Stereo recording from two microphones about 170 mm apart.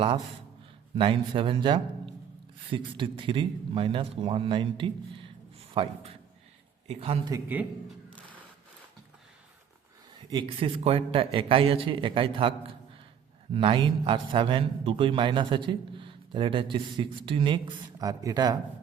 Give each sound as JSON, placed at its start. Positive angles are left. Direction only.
{"t": 0.9, "sound": "a man's voice", "side_deg": -30}
{"t": 7.4, "sound": "speech", "side_deg": -10}
{"t": 10.2, "sound": "a man's voice", "side_deg": -30}